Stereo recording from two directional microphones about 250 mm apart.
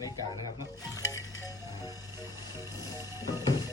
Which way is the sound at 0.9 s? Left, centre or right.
Centre.